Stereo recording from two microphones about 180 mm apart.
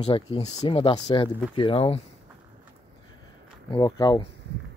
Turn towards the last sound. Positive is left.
turn(degrees=25)  # may be behind; listen again after turning